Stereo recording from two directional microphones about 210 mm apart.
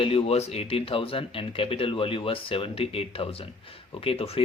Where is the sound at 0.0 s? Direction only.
25° left (ahead or behind).